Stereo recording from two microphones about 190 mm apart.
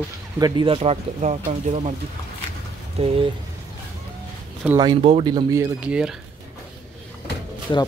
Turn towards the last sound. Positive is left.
turn(degrees=20)  # may be behind; listen again after turning